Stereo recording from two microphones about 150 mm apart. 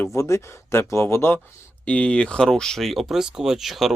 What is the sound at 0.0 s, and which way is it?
Speech, 20° left (ahead or behind).